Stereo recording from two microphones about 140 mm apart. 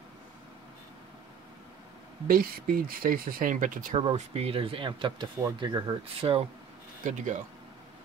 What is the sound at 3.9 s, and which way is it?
Speech, 45° right (ahead or behind).